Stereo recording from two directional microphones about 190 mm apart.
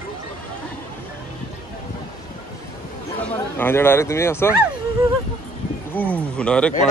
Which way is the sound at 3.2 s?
10° left (ahead or behind).